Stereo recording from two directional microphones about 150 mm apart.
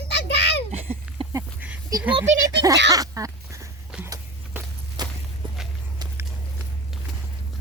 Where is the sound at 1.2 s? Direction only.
35° right (ahead or behind).